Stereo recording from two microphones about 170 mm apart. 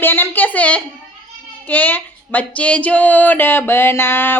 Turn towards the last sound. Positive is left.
turn(degrees=15)  # may be behind; listen again after turning